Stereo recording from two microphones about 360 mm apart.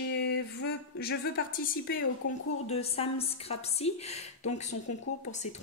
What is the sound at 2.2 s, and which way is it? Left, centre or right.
Speech, left.